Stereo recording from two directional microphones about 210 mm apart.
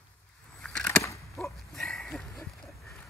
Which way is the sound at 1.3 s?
Centre (ahead or behind).